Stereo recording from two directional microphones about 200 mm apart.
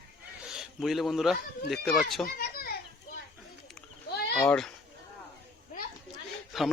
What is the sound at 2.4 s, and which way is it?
Children playing, 50° left (ahead or behind).